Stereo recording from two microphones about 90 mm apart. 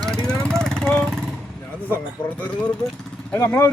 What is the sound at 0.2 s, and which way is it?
Vehicle, 10° left (ahead or behind).